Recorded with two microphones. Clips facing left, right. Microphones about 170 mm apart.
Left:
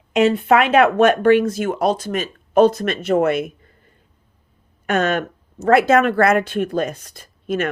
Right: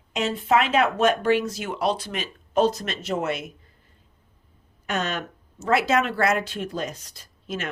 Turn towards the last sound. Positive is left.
turn(degrees=55)  # may be behind; listen again after turning